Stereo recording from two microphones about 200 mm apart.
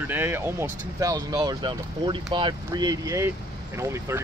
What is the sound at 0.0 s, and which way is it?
Speech, 10° right (ahead or behind).